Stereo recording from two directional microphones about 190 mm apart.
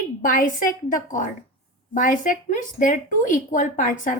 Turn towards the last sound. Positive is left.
turn(degrees=45)  # may be behind; listen again after turning